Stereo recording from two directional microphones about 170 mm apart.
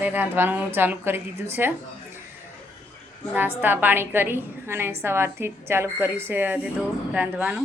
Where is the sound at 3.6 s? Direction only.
10° right (ahead or behind).